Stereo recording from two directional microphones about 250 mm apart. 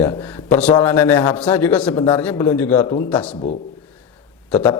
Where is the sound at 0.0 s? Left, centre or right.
Centre.